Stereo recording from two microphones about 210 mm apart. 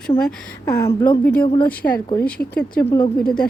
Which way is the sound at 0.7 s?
20° left (ahead or behind).